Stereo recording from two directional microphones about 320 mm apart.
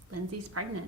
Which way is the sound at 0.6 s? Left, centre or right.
Right.